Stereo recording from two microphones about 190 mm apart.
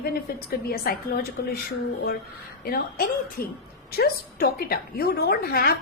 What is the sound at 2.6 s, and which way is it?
A woman's voice, 50° left (ahead or behind).